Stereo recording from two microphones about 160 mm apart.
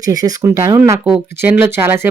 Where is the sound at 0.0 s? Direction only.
25° right (ahead or behind).